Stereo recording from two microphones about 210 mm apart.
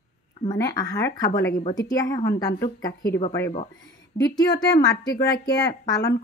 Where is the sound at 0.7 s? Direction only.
15° left (ahead or behind).